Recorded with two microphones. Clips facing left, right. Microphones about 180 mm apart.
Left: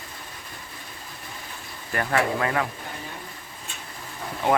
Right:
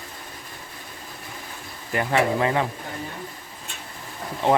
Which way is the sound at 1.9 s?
15° right (ahead or behind).